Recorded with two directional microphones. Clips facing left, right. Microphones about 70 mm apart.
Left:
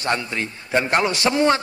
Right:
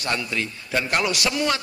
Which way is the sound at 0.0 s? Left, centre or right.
Left.